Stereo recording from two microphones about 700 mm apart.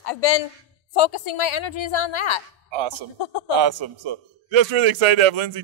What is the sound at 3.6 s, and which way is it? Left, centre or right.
A man's voice, right.